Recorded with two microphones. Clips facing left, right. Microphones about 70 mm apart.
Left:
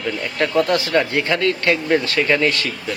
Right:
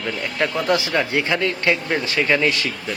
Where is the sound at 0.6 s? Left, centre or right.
Centre.